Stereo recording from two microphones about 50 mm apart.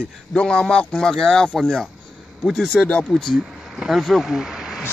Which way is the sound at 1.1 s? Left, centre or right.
Centre.